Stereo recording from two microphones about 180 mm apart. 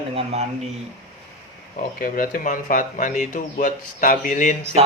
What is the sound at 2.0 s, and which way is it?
Speech, 50° left (ahead or behind).